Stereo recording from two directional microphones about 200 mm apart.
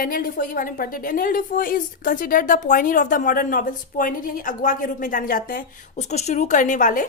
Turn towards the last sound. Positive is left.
turn(degrees=40)  # may be behind; listen again after turning